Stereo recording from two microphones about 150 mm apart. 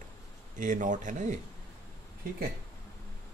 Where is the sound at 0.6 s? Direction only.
60° right (ahead or behind).